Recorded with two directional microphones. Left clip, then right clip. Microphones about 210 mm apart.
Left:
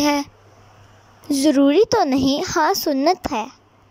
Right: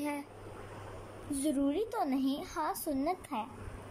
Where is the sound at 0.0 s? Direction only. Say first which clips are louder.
Left 19 dB; 40° left (ahead or behind).